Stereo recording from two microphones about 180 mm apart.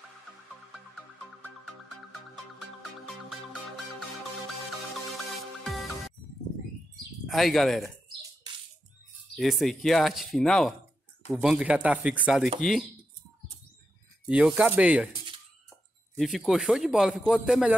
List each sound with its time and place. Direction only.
0.7 s music: centre (ahead or behind)
5.6 s music: centre (ahead or behind)
7.2 s a man's voice: centre (ahead or behind)
9.3 s a man's voice: centre (ahead or behind)
14.2 s a man's voice: 5° right (ahead or behind)
16.2 s a man's voice: centre (ahead or behind)